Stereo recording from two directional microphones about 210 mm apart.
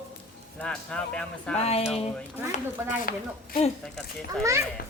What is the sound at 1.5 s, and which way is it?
Speech, 30° left (ahead or behind).